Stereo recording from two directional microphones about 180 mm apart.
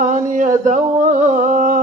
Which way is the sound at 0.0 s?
45° right (ahead or behind).